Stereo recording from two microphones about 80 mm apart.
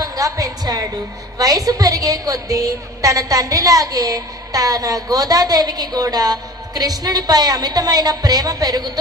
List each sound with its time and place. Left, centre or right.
0.0 s a woman's voice: right